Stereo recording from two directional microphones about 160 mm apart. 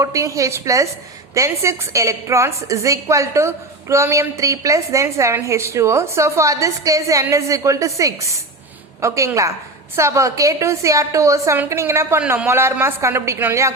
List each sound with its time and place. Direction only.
0.0 s a woman's voice: 20° right (ahead or behind)